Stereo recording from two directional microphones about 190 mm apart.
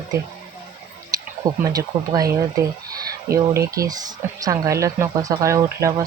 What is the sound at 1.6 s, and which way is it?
Speech, 20° right (ahead or behind).